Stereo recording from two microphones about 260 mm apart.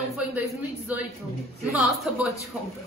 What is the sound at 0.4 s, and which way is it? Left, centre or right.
A woman's voice, centre.